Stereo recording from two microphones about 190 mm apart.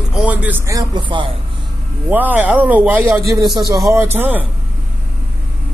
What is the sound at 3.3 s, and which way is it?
A man's voice, 20° right (ahead or behind).